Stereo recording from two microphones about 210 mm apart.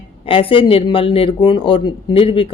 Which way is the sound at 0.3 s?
25° left (ahead or behind).